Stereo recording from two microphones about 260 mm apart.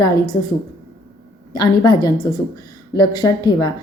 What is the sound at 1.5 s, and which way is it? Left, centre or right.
Speech, centre.